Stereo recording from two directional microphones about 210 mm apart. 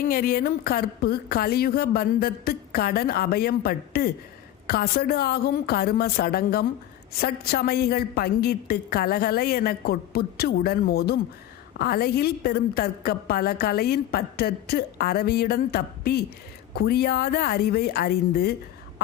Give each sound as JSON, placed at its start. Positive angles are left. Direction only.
{"t": 0.0, "sound": "a woman's voice", "side_deg": 45}